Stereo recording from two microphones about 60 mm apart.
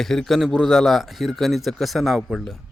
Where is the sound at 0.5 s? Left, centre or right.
Centre.